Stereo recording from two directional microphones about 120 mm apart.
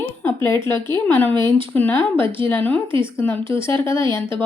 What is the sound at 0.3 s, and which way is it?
A woman's voice, 20° left (ahead or behind).